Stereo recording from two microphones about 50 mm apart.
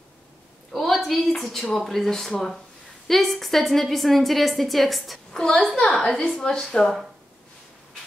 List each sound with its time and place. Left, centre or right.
0.7 s a sound: centre
1.2 s a woman's voice: centre
5.3 s a woman's voice: centre